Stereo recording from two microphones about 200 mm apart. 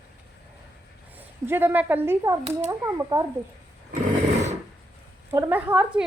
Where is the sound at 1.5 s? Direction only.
10° right (ahead or behind).